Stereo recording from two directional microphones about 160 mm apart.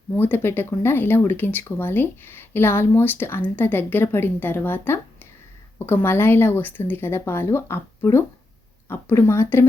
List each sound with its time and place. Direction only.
0.2 s speech: 15° left (ahead or behind)